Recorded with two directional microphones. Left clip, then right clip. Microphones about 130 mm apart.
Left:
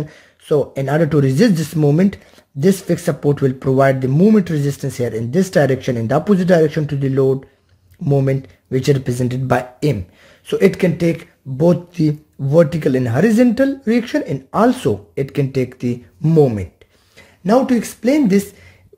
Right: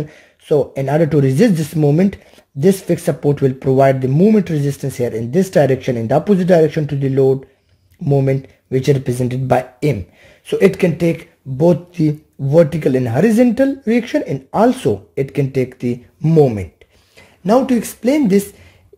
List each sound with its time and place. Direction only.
0.0 s speech: 5° right (ahead or behind); by 11.2 s 25° right (ahead or behind)
11.5 s speech: 5° right (ahead or behind)
17.4 s a woman's voice: 30° right (ahead or behind)